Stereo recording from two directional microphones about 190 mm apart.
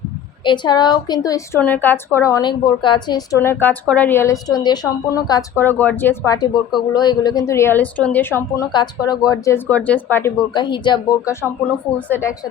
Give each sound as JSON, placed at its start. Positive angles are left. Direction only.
{"t": 0.4, "sound": "a woman's voice", "side_deg": 25}
{"t": 10.5, "sound": "a woman's voice", "side_deg": 25}
{"t": 11.9, "sound": "a woman's voice", "side_deg": 10}